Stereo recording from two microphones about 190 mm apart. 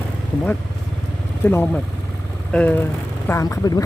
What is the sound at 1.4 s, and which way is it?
Speech, 10° left (ahead or behind).